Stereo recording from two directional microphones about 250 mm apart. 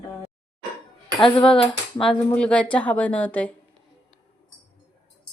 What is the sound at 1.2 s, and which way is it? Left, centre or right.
Speech, left.